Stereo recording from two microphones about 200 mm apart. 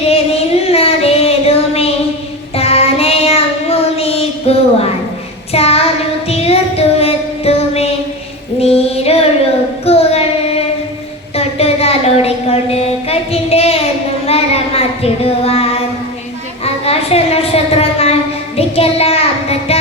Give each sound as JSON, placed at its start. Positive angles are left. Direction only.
{"t": 0.0, "sound": "child singing", "side_deg": 30}
{"t": 8.5, "sound": "female singing", "side_deg": 30}
{"t": 9.8, "sound": "child singing", "side_deg": 30}
{"t": 11.3, "sound": "a sound", "side_deg": 30}
{"t": 14.3, "sound": "child singing", "side_deg": 30}
{"t": 16.6, "sound": "a sound", "side_deg": 30}
{"t": 18.5, "sound": "child singing", "side_deg": 30}